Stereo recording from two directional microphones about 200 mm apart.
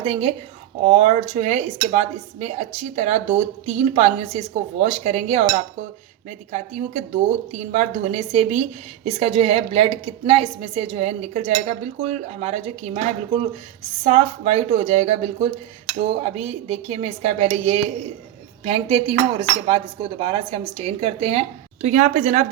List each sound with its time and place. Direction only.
0.0 s a woman's voice: 30° right (ahead or behind)
6.5 s speech: 35° right (ahead or behind)